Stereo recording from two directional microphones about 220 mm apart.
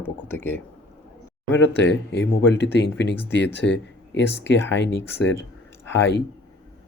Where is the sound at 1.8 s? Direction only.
55° left (ahead or behind).